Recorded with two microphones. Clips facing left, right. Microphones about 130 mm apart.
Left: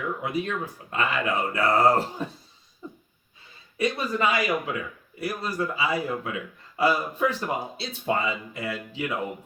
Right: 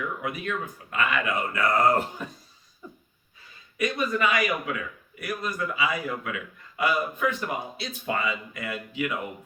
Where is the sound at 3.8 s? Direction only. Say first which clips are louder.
Even; 30° left (ahead or behind).